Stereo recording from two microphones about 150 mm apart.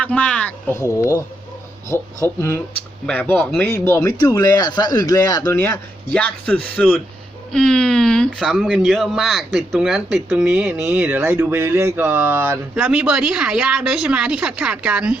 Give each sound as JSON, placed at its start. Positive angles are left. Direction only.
{"t": 0.0, "sound": "speech", "side_deg": 5}
{"t": 0.8, "sound": "speech", "side_deg": 20}